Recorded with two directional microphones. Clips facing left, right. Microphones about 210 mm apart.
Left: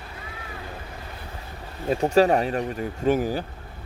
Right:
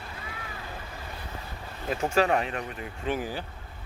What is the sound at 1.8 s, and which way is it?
Speech, 35° left (ahead or behind).